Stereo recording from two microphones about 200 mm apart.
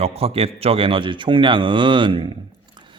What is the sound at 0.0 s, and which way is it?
A man's voice, 30° right (ahead or behind).